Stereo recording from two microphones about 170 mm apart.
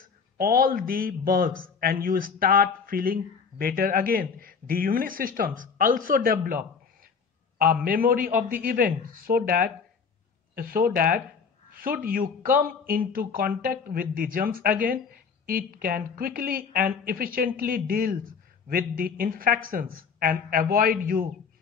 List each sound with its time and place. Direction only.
0.0 s a man's voice: 60° right (ahead or behind)